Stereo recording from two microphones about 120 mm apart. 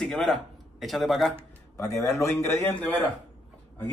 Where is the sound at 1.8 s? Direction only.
25° left (ahead or behind).